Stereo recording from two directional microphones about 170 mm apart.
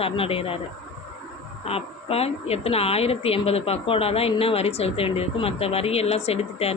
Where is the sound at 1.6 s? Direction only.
35° left (ahead or behind).